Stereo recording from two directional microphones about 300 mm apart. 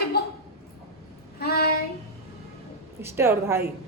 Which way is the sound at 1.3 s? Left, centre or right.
Left.